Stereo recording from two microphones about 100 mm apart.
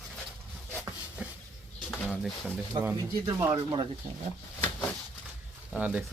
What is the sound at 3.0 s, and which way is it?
Speech, 35° right (ahead or behind).